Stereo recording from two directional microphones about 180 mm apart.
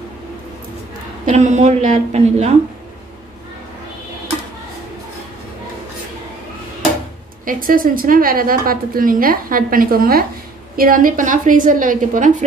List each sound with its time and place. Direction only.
1.2 s a woman's voice: 40° right (ahead or behind)
7.4 s a woman's voice: 50° right (ahead or behind)